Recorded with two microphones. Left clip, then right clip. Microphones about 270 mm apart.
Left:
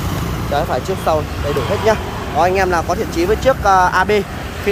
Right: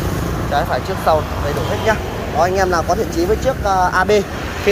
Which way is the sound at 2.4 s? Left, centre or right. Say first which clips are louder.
Left 1 dB; centre.